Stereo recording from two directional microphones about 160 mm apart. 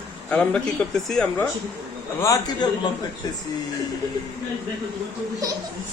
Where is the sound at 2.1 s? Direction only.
20° left (ahead or behind).